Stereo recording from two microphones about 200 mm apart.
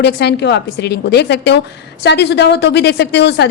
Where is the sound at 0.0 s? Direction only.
55° left (ahead or behind).